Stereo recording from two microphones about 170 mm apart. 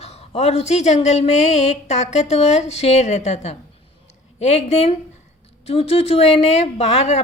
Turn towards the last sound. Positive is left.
turn(degrees=40)  # may be behind; listen again after turning